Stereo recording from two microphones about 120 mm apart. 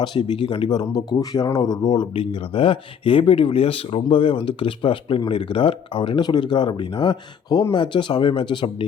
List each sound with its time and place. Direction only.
0.0 s speech: 40° left (ahead or behind)